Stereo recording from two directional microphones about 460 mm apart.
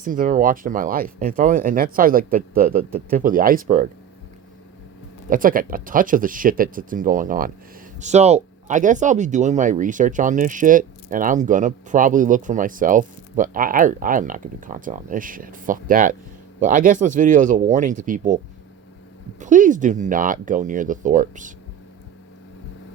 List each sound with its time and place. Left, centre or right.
0.0 s speech: centre
5.3 s speech: centre
19.4 s speech: centre